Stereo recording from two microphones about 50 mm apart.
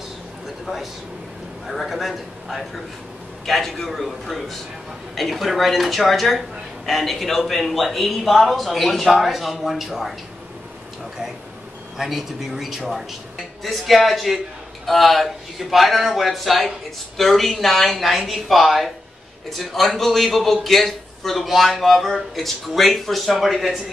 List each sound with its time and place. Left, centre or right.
1.7 s a man's voice: centre
12.0 s a man's voice: centre